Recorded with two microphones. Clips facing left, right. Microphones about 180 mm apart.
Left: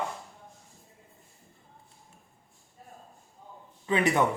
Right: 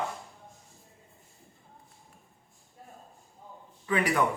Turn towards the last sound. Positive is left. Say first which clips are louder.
# left 2 dB
turn(degrees=25)  # may be behind; listen again after turning